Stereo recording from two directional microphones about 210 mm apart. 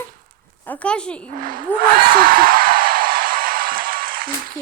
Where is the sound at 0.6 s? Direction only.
5° left (ahead or behind).